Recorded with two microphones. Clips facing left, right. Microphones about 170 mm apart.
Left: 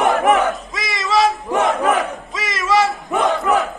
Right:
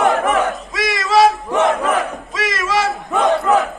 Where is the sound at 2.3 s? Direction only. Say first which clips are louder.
Left 2 dB; centre (ahead or behind).